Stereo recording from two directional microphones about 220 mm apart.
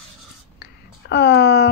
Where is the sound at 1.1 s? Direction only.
50° left (ahead or behind).